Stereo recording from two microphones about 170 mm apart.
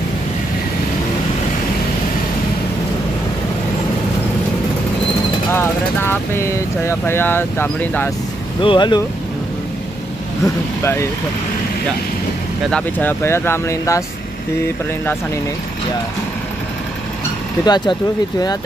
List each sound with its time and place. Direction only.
5.5 s speech: 15° left (ahead or behind)
8.5 s speech: 30° left (ahead or behind)
10.4 s speech: 15° left (ahead or behind)
12.7 s speech: 10° left (ahead or behind)
17.6 s speech: 25° left (ahead or behind)